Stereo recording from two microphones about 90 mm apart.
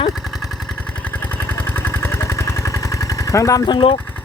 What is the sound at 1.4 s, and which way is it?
Vehicle, 25° left (ahead or behind).